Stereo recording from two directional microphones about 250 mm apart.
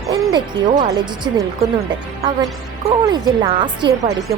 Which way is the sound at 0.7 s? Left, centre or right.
Centre.